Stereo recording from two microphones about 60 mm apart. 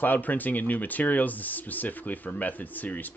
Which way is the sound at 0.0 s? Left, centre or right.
Left.